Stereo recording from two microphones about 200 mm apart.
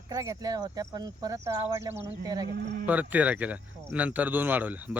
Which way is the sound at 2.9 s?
5° right (ahead or behind).